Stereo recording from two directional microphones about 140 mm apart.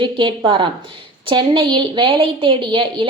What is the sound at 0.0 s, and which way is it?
A woman's voice, 35° right (ahead or behind).